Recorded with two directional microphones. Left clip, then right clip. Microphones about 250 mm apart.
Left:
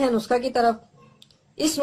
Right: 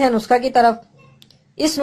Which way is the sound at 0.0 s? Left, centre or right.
Right.